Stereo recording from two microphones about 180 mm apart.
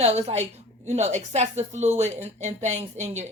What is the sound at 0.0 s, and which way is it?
A woman's voice, 35° right (ahead or behind).